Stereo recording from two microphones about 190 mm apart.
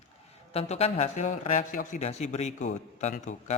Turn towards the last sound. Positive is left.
turn(degrees=40)  # may be behind; listen again after turning